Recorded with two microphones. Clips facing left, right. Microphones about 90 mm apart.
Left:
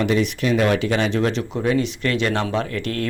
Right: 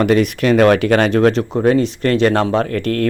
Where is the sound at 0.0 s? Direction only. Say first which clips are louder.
Right 6 dB; 55° right (ahead or behind).